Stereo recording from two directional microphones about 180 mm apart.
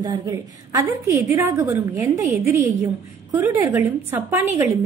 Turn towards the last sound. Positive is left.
turn(degrees=-10)  # may be behind; listen again after turning